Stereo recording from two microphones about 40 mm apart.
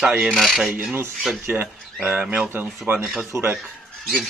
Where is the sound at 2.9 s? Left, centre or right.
Right.